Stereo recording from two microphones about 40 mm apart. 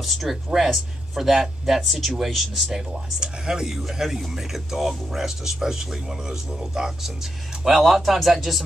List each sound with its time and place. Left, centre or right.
0.0 s speech: centre
2.9 s speech: centre